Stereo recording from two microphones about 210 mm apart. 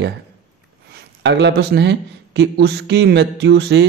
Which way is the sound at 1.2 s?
55° right (ahead or behind).